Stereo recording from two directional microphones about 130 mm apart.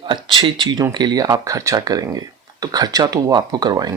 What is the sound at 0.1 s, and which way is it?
Speech, 40° right (ahead or behind).